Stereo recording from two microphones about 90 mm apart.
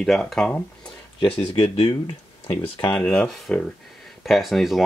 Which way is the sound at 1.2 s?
80° left.